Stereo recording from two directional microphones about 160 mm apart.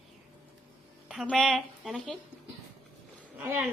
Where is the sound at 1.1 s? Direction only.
Centre (ahead or behind).